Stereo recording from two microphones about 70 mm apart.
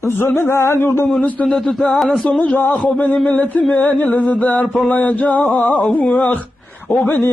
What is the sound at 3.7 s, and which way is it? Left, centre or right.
Music, centre.